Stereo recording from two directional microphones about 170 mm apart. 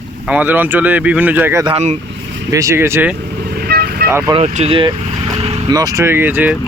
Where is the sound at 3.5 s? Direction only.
65° right (ahead or behind).